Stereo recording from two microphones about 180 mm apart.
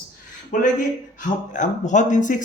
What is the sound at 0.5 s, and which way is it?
Speech, 45° left (ahead or behind).